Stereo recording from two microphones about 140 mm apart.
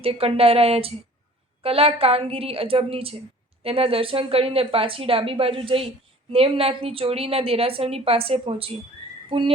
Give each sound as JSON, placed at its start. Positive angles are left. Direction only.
{"t": 0.0, "sound": "a woman's voice", "side_deg": -45}